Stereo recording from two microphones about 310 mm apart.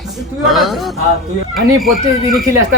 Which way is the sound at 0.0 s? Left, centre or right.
Centre.